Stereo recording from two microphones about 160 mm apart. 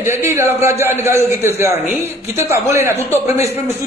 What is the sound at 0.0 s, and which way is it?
A man's voice, 15° right (ahead or behind).